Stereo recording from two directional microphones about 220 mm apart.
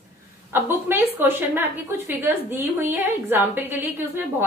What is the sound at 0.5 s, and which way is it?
A woman's voice, 10° right (ahead or behind).